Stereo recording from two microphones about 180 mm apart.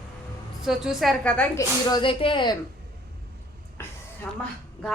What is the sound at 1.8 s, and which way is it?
Speech, 25° left (ahead or behind).